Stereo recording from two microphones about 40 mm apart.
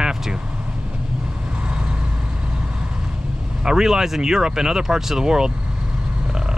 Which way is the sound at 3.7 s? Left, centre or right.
Centre.